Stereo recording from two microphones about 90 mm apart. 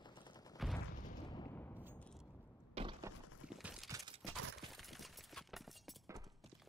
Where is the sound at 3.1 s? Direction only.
35° right (ahead or behind).